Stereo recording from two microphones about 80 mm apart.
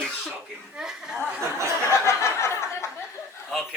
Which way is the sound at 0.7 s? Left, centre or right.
Centre.